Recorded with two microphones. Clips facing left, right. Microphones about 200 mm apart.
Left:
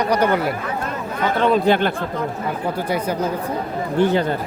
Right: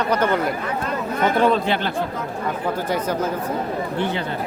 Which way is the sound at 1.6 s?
50° left (ahead or behind).